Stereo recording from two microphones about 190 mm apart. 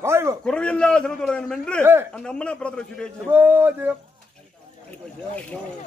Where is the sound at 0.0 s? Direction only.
15° right (ahead or behind).